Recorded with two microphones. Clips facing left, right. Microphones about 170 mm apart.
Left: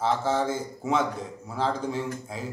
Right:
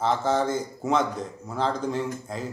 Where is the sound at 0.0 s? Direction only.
5° left (ahead or behind).